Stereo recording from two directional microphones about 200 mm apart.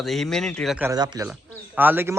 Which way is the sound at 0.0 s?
Centre (ahead or behind).